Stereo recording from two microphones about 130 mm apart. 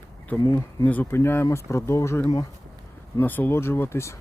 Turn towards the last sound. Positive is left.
turn(degrees=20)  # may be behind; listen again after turning